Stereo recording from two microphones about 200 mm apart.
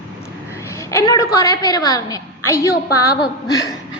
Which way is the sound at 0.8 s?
15° left (ahead or behind).